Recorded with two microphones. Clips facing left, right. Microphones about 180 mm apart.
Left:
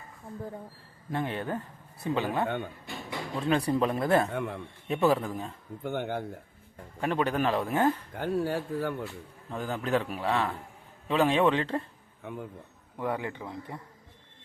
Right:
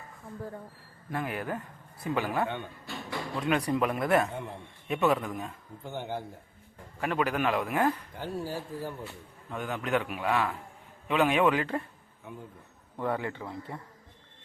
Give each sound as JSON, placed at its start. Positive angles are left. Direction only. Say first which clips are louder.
{"t": 1.1, "sound": "speech", "louder": "left 2 dB", "side_deg": 25}
{"t": 2.8, "sound": "music", "louder": "even", "side_deg": 15}
{"t": 3.4, "sound": "speech", "louder": "left 2 dB", "side_deg": 30}
{"t": 4.3, "sound": "a man's voice", "louder": "left 5 dB", "side_deg": 70}
{"t": 4.9, "sound": "a man's voice", "louder": "left 1 dB", "side_deg": 30}
{"t": 5.8, "sound": "speech", "louder": "left 4 dB", "side_deg": 60}
{"t": 7.2, "sound": "a man's voice", "louder": "even", "side_deg": 35}
{"t": 8.1, "sound": "speech", "louder": "left 6 dB", "side_deg": 60}
{"t": 9.5, "sound": "a man's voice", "louder": "left 1 dB", "side_deg": 30}
{"t": 12.2, "sound": "a man's voice", "louder": "left 5 dB", "side_deg": 70}
{"t": 13.0, "sound": "speech", "louder": "right 1 dB", "side_deg": 15}